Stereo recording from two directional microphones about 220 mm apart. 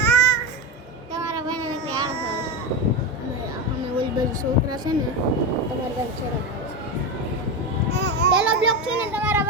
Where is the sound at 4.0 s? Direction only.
20° right (ahead or behind).